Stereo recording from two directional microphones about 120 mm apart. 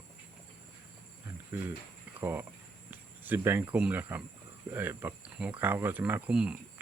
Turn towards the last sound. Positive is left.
turn(degrees=-10)  # may be behind; listen again after turning